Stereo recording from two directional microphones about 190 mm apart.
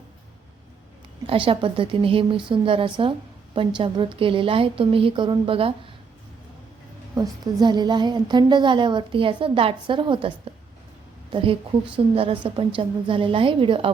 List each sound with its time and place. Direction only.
1.3 s a woman's voice: 30° right (ahead or behind)
7.2 s a woman's voice: 20° right (ahead or behind)